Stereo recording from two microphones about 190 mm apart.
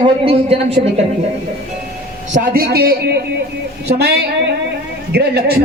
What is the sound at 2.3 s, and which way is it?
Speech, 50° right (ahead or behind).